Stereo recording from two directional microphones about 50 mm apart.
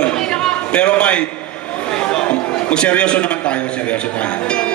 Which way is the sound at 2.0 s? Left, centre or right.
Centre.